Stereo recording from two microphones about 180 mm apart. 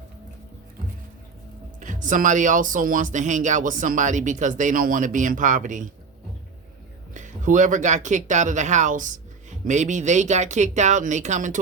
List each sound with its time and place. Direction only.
1.8 s speech: 45° right (ahead or behind)
7.1 s speech: 45° right (ahead or behind)